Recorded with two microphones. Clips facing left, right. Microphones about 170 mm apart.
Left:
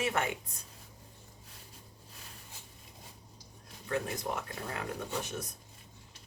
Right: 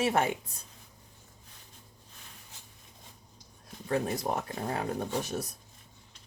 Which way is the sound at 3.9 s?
35° right (ahead or behind).